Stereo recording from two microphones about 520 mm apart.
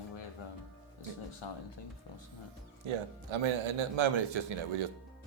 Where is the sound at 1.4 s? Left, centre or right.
Left.